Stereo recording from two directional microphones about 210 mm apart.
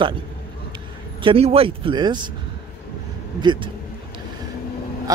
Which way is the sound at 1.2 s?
25° right (ahead or behind).